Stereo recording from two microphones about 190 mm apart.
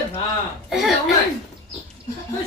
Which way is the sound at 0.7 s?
Centre (ahead or behind).